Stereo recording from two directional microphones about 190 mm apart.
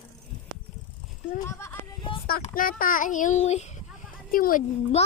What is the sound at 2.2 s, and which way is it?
A child's voice, 50° left (ahead or behind).